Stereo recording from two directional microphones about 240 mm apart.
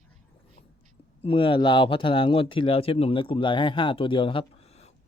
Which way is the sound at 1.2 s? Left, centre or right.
Left.